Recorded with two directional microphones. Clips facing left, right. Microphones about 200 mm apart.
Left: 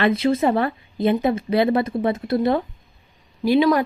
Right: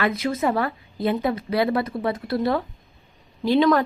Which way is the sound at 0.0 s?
30° left (ahead or behind).